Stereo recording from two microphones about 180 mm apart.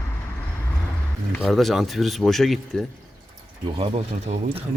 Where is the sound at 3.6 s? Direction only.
30° right (ahead or behind).